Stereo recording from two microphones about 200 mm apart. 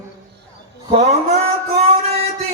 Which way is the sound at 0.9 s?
30° right (ahead or behind).